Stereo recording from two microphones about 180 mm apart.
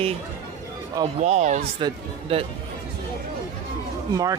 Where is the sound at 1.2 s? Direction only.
40° right (ahead or behind).